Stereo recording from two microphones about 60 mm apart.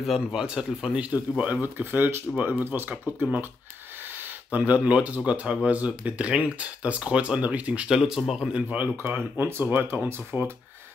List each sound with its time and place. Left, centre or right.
0.0 s speech: centre; by 1.6 s right
1.6 s speech: right
4.5 s speech: right
7.9 s speech: centre
8.5 s speech: right
10.0 s speech: right